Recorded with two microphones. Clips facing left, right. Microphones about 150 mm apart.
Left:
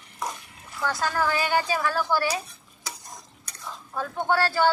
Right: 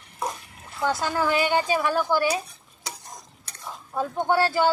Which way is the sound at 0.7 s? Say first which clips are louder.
Right 2 dB; 20° right (ahead or behind).